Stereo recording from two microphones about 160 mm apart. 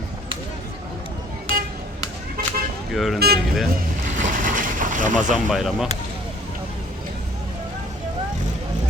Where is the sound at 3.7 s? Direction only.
55° right (ahead or behind).